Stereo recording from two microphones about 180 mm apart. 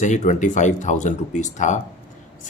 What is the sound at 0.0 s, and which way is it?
Speech, 45° left (ahead or behind).